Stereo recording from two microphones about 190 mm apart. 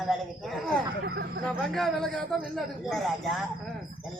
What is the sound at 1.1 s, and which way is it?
Speech, 55° right (ahead or behind).